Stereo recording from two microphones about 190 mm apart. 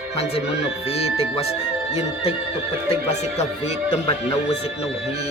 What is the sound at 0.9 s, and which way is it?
Speech, 35° left (ahead or behind).